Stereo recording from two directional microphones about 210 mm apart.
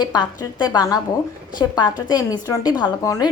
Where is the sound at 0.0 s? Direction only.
20° left (ahead or behind).